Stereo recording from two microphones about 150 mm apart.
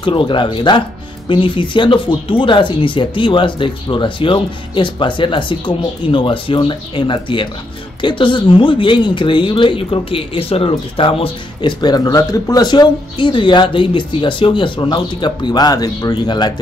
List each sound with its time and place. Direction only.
0.0 s speech: 35° left (ahead or behind)